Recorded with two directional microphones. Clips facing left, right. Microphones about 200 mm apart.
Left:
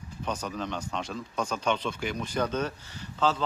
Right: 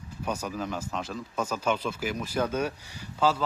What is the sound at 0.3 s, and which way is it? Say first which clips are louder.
Speech: right 1 dB; 10° right (ahead or behind).